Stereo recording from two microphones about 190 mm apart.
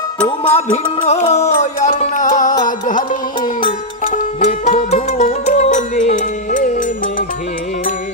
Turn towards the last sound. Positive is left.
turn(degrees=45)  # may be behind; listen again after turning